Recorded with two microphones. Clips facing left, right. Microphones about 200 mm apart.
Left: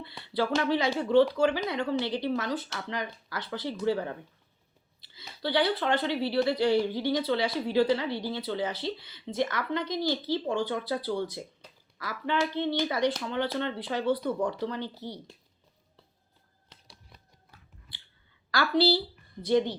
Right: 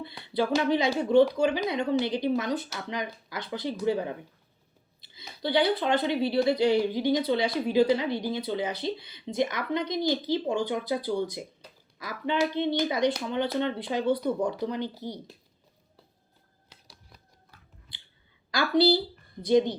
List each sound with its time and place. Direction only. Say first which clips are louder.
0.0 s speech: right 2 dB; 15° right (ahead or behind)
18.5 s speech: right 2 dB; 15° right (ahead or behind)